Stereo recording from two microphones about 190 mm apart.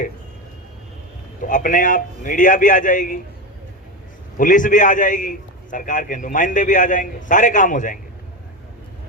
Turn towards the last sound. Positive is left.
turn(degrees=45)  # may be behind; listen again after turning